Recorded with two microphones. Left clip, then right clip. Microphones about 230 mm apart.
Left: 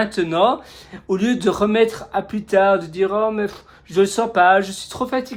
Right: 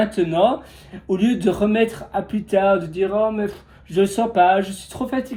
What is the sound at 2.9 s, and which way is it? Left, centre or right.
Speech, left.